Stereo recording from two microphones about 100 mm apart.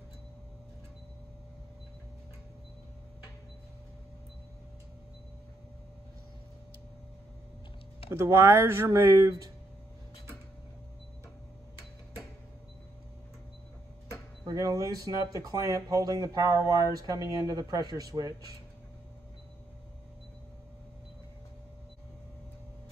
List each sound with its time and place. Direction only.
8.1 s speech: 25° right (ahead or behind)
14.4 s speech: 35° right (ahead or behind)